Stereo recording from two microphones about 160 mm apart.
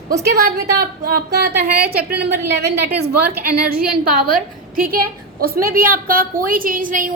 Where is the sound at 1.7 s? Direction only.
85° right; by 7.1 s 55° right (ahead or behind).